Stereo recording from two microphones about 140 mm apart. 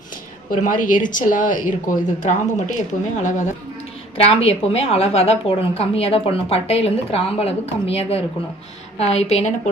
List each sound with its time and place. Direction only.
0.5 s speech: 70° left (ahead or behind)
4.2 s a woman's voice: 45° left (ahead or behind)